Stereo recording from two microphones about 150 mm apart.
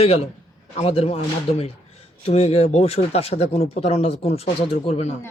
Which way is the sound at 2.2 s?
40° left (ahead or behind).